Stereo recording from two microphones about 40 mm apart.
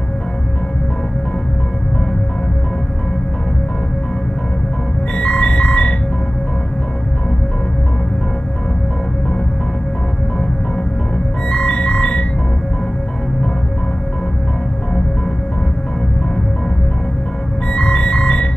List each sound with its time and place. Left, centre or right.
5.1 s music: left
11.5 s music: left
17.7 s music: left